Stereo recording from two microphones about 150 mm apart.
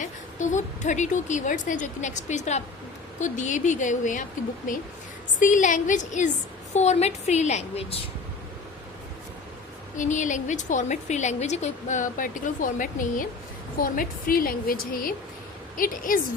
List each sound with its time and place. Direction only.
0.0 s a woman's voice: 55° left (ahead or behind)
10.0 s a woman's voice: 55° left (ahead or behind)